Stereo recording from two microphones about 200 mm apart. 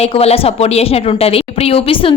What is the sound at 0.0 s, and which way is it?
Speech, 30° left (ahead or behind).